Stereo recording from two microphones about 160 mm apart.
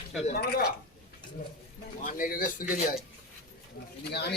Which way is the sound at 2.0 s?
60° left (ahead or behind).